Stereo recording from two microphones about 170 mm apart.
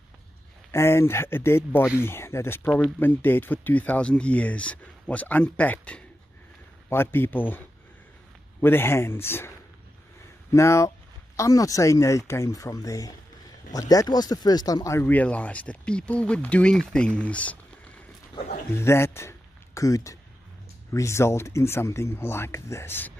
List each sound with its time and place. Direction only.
0.7 s speech: 15° left (ahead or behind)
10.5 s speech: 15° left (ahead or behind)
18.8 s a man's voice: 15° left (ahead or behind)